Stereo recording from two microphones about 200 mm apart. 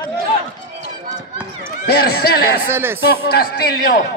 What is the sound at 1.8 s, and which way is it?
Speech, 50° left (ahead or behind).